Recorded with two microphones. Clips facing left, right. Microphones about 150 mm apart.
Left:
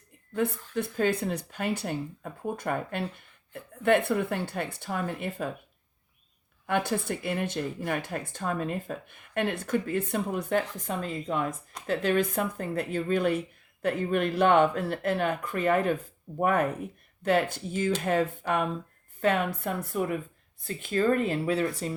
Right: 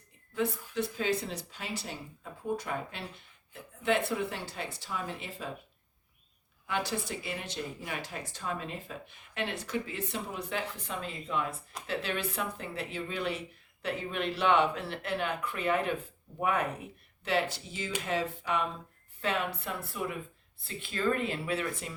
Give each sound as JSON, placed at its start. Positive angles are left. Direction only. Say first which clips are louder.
{"t": 0.7, "sound": "speech", "louder": "left 4 dB", "side_deg": 50}
{"t": 6.7, "sound": "speech", "louder": "left 6 dB", "side_deg": 55}